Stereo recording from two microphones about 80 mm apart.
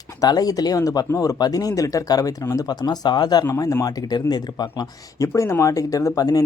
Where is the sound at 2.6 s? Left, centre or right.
Left.